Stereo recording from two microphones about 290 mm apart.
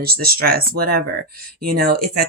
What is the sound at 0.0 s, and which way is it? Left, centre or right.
Speech, right.